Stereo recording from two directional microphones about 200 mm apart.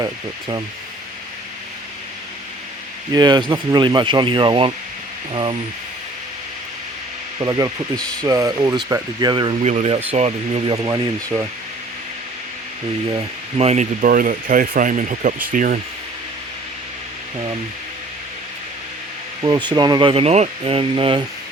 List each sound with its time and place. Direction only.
0.0 s speech: 20° right (ahead or behind)
3.1 s speech: 20° right (ahead or behind)
7.3 s speech: 20° right (ahead or behind)
10.8 s speech: 20° right (ahead or behind)
13.1 s speech: 25° right (ahead or behind)
19.4 s speech: 20° right (ahead or behind)